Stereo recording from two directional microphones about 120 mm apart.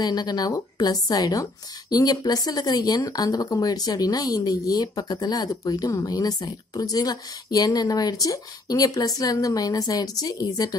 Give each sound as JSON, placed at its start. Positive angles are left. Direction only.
{"t": 0.0, "sound": "a woman's voice", "side_deg": 35}